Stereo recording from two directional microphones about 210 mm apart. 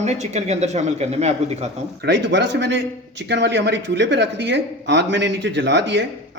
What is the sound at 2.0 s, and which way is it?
Speech, 55° right (ahead or behind).